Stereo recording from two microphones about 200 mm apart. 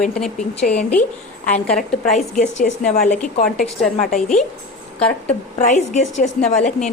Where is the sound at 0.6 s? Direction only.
35° left (ahead or behind).